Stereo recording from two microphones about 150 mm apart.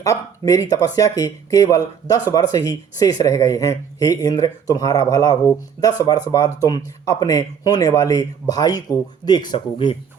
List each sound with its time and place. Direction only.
0.0 s speech: 20° left (ahead or behind)